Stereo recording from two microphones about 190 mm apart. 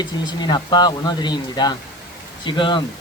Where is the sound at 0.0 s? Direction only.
20° left (ahead or behind).